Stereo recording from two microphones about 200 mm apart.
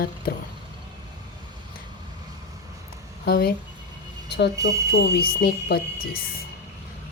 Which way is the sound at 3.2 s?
50° left (ahead or behind).